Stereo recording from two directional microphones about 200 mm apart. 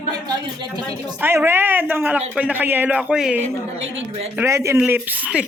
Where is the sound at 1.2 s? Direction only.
10° right (ahead or behind).